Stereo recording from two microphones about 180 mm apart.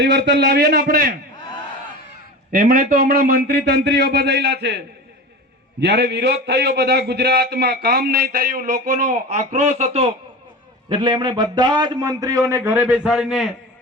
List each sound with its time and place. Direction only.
0.0 s a man's voice: 65° right (ahead or behind)
2.5 s a man's voice: 50° right (ahead or behind); by 4.8 s 65° right (ahead or behind)
5.8 s a man's voice: 70° right (ahead or behind); by 13.5 s centre (ahead or behind)